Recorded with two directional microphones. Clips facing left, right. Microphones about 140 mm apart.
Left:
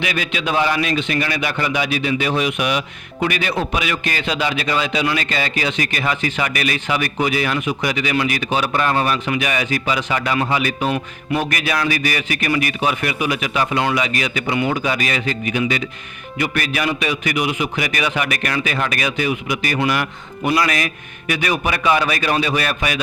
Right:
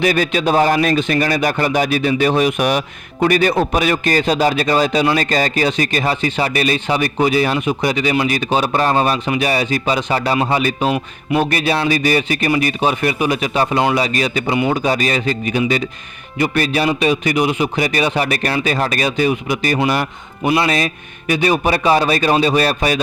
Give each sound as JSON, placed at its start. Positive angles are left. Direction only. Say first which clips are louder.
{"t": 0.0, "sound": "a man's voice", "louder": "right 7 dB", "side_deg": -40}
{"t": 10.9, "sound": "speech", "louder": "right 4 dB", "side_deg": -15}
{"t": 11.4, "sound": "a man's voice", "louder": "right 4 dB", "side_deg": -30}